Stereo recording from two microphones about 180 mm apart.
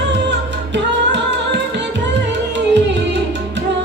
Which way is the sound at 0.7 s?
80° right.